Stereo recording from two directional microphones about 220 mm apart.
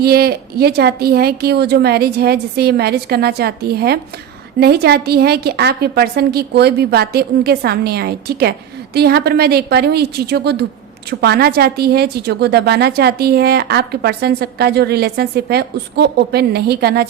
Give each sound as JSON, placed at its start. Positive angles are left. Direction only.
{"t": 0.0, "sound": "a woman's voice", "side_deg": -45}